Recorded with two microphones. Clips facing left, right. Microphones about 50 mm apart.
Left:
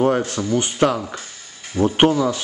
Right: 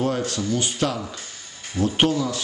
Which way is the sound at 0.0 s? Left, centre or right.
Left.